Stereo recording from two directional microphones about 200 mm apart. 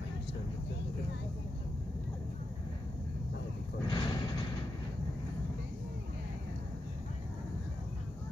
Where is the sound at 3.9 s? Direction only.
20° left (ahead or behind).